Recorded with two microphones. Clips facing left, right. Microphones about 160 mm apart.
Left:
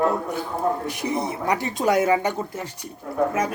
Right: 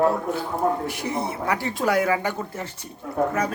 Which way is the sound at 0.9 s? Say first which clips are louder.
Left 2 dB; 20° left (ahead or behind).